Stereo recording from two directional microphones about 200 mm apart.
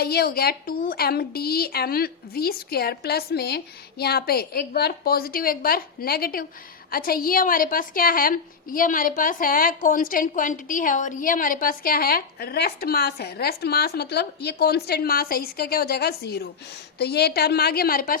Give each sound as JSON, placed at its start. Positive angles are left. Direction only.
{"t": 0.0, "sound": "a woman's voice", "side_deg": 50}